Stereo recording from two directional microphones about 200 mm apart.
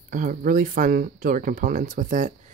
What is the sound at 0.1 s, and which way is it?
Speech, 45° right (ahead or behind).